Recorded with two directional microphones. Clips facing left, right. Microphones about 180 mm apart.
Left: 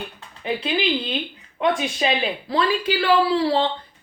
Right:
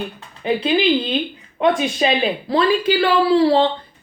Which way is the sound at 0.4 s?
25° right (ahead or behind).